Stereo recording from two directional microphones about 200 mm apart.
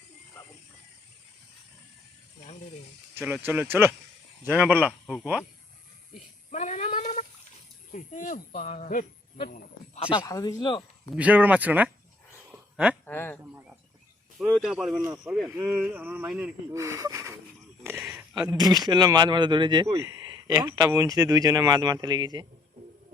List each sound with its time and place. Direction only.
3.2 s speech: 10° right (ahead or behind)
6.5 s a sound: 35° left (ahead or behind)
7.9 s speech: 40° left (ahead or behind)
10.0 s speech: 25° left (ahead or behind)
11.1 s speech: 5° right (ahead or behind)
12.7 s a sound: 5° right (ahead or behind)
13.1 s speech: 10° left (ahead or behind)
13.4 s bird: 10° right (ahead or behind)
14.3 s speech: centre (ahead or behind)
18.0 s a sound: 5° right (ahead or behind)
18.4 s speech: 20° right (ahead or behind)